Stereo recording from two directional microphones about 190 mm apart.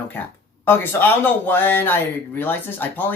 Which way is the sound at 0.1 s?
10° left (ahead or behind).